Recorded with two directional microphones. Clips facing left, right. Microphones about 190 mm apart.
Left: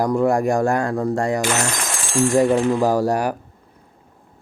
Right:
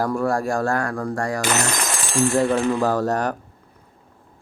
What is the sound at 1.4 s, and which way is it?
Speech, 40° right (ahead or behind).